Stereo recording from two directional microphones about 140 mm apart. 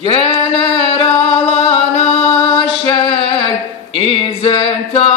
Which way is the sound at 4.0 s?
40° left (ahead or behind).